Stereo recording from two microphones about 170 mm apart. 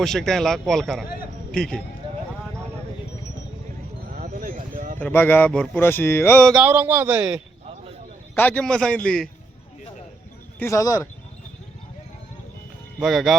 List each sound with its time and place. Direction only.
0.0 s speech: 5° left (ahead or behind)
4.1 s a sound: 55° right (ahead or behind)
4.9 s speech: 10° left (ahead or behind)
6.5 s a man's voice: 10° right (ahead or behind)
8.4 s speech: 10° left (ahead or behind)
10.6 s speech: 20° left (ahead or behind)
13.0 s speech: centre (ahead or behind)